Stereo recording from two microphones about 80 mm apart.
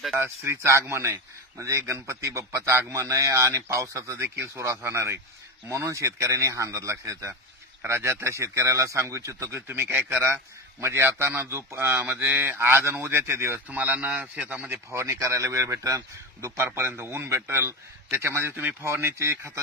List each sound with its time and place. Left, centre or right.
0.1 s a man's voice: right
9.6 s a man's voice: right
13.7 s a man's voice: centre
14.9 s a man's voice: right
16.6 s a man's voice: right